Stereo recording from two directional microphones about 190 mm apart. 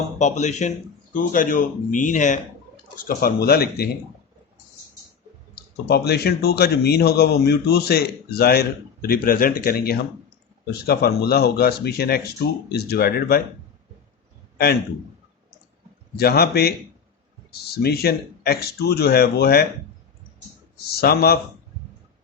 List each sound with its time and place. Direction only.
0.2 s speech: 40° left (ahead or behind); by 3.8 s 55° left (ahead or behind)
5.5 s speech: 55° left (ahead or behind)
16.1 s speech: 55° left (ahead or behind)
20.7 s speech: 55° left (ahead or behind)